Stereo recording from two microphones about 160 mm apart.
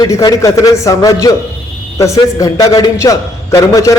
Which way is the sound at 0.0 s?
25° left (ahead or behind).